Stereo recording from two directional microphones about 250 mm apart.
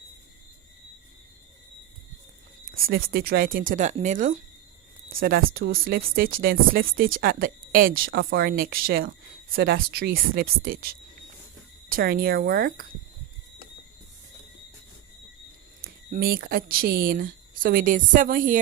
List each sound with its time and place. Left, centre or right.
2.7 s speech: right
11.9 s speech: right
15.8 s speech: right